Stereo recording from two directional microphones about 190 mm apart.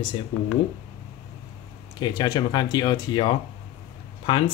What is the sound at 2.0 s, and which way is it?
Speech, 20° left (ahead or behind).